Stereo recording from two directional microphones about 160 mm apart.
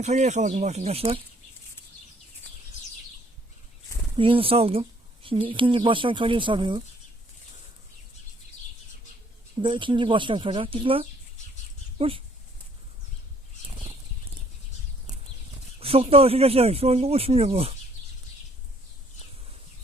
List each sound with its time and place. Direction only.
0.0 s speech: 45° right (ahead or behind)
4.2 s speech: 35° right (ahead or behind)
9.6 s speech: 30° right (ahead or behind)
15.8 s speech: 35° right (ahead or behind)